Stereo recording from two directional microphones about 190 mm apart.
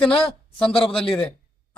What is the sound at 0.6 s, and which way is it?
Speech, 30° left (ahead or behind).